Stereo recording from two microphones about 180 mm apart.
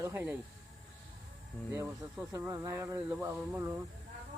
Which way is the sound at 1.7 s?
15° right (ahead or behind).